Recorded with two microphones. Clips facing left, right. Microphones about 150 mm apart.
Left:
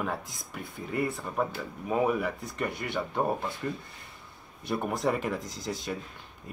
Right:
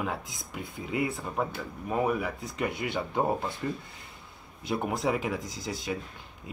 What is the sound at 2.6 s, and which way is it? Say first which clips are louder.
Speech: right 2 dB; 15° right (ahead or behind).